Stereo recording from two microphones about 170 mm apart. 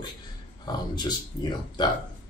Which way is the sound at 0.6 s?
25° left (ahead or behind).